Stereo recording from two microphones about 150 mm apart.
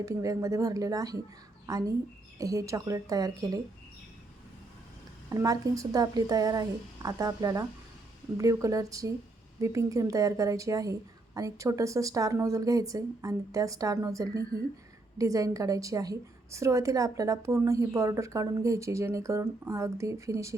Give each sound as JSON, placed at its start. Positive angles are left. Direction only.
{"t": 0.0, "sound": "a woman's voice", "side_deg": -20}
{"t": 2.4, "sound": "a woman's voice", "side_deg": -25}
{"t": 5.3, "sound": "a woman's voice", "side_deg": -20}